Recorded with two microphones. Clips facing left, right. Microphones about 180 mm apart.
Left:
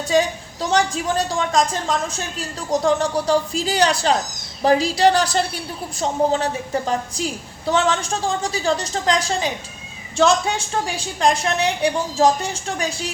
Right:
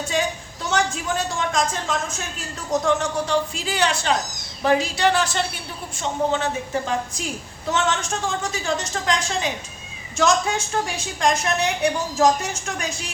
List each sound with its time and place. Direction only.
0.7 s a woman's voice: 35° left (ahead or behind)